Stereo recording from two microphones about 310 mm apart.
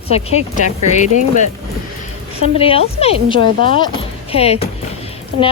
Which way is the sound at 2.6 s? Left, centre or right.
Centre.